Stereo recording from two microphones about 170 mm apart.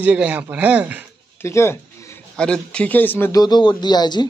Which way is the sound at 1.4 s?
15° left (ahead or behind).